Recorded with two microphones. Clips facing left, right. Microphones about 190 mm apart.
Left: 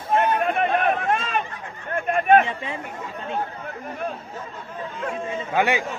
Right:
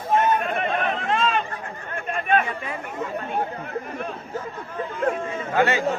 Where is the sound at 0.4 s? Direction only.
50° left (ahead or behind).